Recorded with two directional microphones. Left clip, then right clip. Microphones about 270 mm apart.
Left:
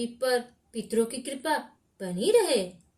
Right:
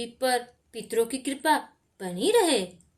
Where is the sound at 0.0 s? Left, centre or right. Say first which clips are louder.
Right 1 dB; right.